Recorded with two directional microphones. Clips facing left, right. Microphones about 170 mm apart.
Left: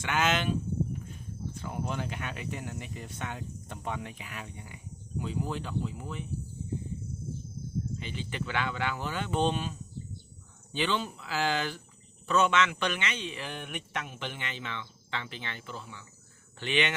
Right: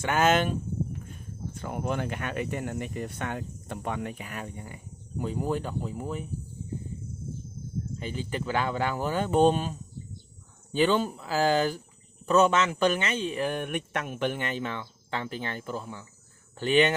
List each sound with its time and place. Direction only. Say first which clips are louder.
0.0 s speech: right 5 dB; 45° right (ahead or behind)
1.5 s speech: right 5 dB; 60° right (ahead or behind); by 6.2 s 40° right (ahead or behind)
7.9 s speech: right 4 dB; 40° right (ahead or behind)